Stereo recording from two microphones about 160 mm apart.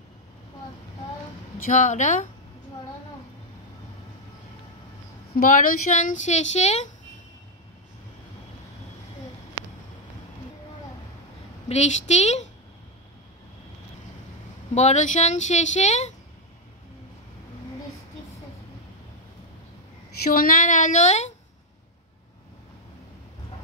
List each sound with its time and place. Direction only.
1.6 s speech: 50° left (ahead or behind)
5.3 s speech: 60° left (ahead or behind)
11.7 s speech: 45° left (ahead or behind)
14.7 s speech: 45° left (ahead or behind)
20.2 s speech: 60° left (ahead or behind)